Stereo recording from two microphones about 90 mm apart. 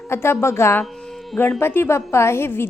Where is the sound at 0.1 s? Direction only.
30° left (ahead or behind).